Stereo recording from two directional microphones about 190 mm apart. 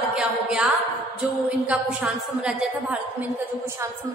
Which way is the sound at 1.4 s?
5° right (ahead or behind).